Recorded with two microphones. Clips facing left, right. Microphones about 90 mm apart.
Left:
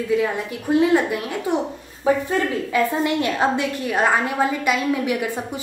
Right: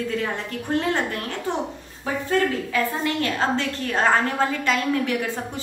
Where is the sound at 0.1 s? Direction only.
10° left (ahead or behind).